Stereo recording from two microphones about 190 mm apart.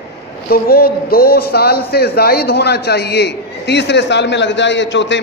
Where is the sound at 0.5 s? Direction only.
50° left (ahead or behind).